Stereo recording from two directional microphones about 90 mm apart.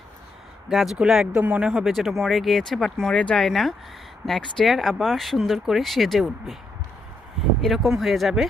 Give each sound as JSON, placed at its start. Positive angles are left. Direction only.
{"t": 0.7, "sound": "speech", "side_deg": 0}
{"t": 1.4, "sound": "speech", "side_deg": -20}
{"t": 1.6, "sound": "speech", "side_deg": -5}
{"t": 3.5, "sound": "speech", "side_deg": 0}
{"t": 7.6, "sound": "speech", "side_deg": 0}